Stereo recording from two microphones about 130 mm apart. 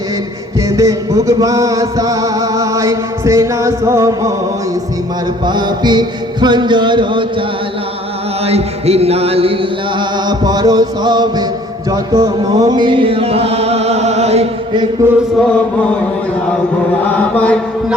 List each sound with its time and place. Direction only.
0.7 s music: 25° right (ahead or behind)
5.5 s music: 35° right (ahead or behind)
8.4 s music: 50° right (ahead or behind); by 11.4 s 35° right (ahead or behind)
11.9 s chant: 30° right (ahead or behind); by 14.4 s 55° right (ahead or behind)
15.0 s chant: 15° right (ahead or behind)
17.2 s mantra: 10° left (ahead or behind)